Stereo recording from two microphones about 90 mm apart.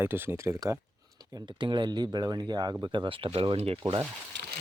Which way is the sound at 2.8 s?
60° right (ahead or behind).